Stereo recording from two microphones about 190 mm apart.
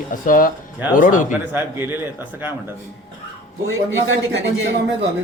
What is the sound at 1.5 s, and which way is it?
Speech, 10° right (ahead or behind).